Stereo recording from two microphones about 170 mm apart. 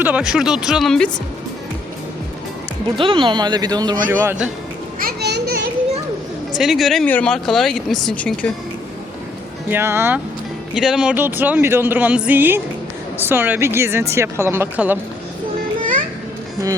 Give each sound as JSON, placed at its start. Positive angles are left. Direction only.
{"t": 0.0, "sound": "speech", "side_deg": -10}
{"t": 3.0, "sound": "speech", "side_deg": -30}
{"t": 4.1, "sound": "speech", "side_deg": -15}
{"t": 4.9, "sound": "children playing", "side_deg": -65}
{"t": 6.6, "sound": "speech", "side_deg": 0}
{"t": 9.6, "sound": "speech", "side_deg": -15}